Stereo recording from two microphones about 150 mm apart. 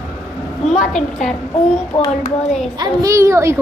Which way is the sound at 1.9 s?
15° left (ahead or behind).